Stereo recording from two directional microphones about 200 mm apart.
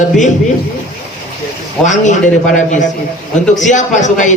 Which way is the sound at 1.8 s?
35° left (ahead or behind).